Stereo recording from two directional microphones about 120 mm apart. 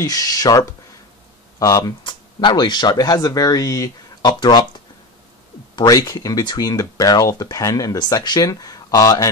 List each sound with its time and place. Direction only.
0.0 s speech: 30° left (ahead or behind)
5.8 s speech: 30° left (ahead or behind)